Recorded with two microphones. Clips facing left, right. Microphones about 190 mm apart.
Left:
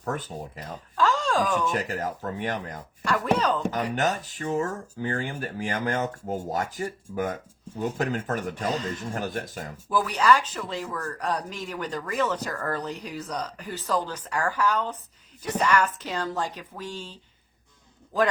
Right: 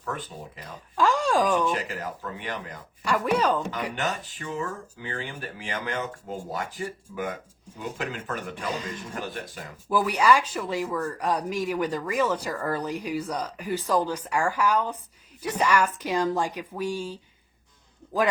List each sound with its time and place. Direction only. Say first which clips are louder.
0.0 s speech: left 3 dB; 45° left (ahead or behind)
0.9 s speech: right 2 dB; 10° right (ahead or behind)
1.7 s speech: left 2 dB; 45° left (ahead or behind)
3.0 s speech: right 1 dB; 10° right (ahead or behind)
3.9 s speech: left 4 dB; 40° left (ahead or behind)
8.7 s speech: left 2 dB; 10° right (ahead or behind)
9.1 s speech: left 3 dB; 45° left (ahead or behind)
9.9 s speech: right 1 dB; 10° right (ahead or behind)